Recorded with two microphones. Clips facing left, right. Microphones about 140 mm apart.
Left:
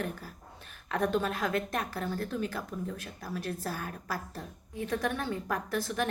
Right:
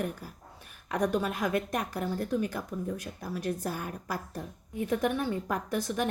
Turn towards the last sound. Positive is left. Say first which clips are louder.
# right 1 dB
turn(degrees=-15)  # may be behind; listen again after turning